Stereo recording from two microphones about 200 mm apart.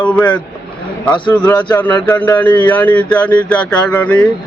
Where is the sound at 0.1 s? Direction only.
5° left (ahead or behind).